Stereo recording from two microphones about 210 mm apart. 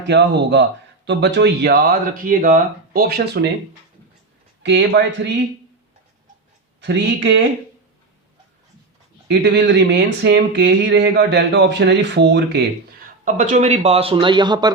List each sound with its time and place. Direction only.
0.1 s speech: 55° right (ahead or behind)
4.6 s speech: 55° right (ahead or behind)
6.8 s speech: 55° right (ahead or behind)
9.2 s speech: 55° right (ahead or behind)
13.2 s speech: 35° right (ahead or behind); by 14.7 s 20° right (ahead or behind)